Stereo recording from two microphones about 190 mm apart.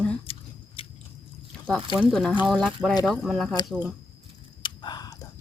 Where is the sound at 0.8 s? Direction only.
30° left (ahead or behind).